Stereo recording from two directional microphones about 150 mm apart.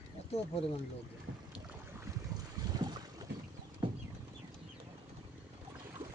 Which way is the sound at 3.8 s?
35° right (ahead or behind).